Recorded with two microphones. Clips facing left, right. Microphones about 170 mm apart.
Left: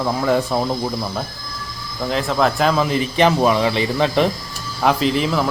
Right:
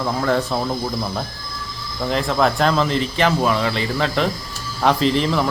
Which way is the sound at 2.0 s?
Centre (ahead or behind).